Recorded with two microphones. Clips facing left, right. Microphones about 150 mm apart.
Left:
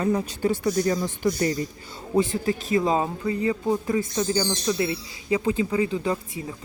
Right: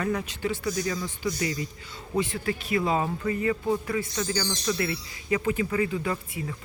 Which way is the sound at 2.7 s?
40° left (ahead or behind).